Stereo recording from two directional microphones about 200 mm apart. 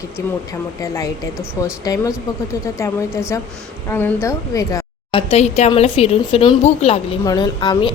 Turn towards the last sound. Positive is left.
turn(degrees=20)  # may be behind; listen again after turning